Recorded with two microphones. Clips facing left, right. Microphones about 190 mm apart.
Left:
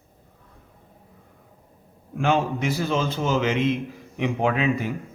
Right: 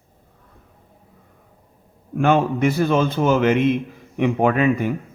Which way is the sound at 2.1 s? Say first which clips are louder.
Right 5 dB; 55° right (ahead or behind).